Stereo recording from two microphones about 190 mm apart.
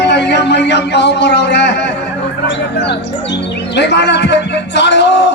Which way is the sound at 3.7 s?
65° left (ahead or behind).